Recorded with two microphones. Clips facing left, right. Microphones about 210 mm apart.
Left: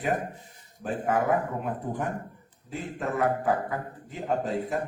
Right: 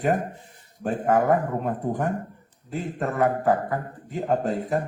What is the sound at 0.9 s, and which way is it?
Speech, 45° right (ahead or behind).